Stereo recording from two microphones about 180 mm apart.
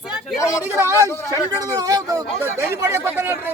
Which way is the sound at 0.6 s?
15° right (ahead or behind).